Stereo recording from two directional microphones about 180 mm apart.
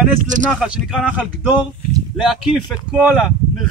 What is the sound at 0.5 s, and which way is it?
Speech, 5° right (ahead or behind).